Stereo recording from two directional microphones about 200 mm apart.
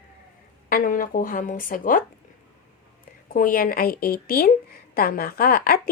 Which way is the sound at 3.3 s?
45° left (ahead or behind).